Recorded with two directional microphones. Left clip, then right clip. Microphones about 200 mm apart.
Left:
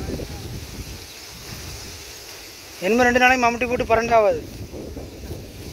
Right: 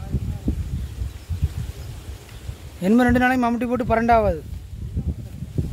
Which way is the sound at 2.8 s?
20° right (ahead or behind).